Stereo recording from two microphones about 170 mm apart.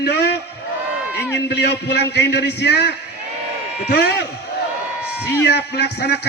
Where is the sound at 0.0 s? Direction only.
70° left (ahead or behind).